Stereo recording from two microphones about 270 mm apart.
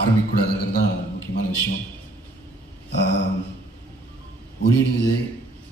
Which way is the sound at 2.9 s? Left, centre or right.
Left.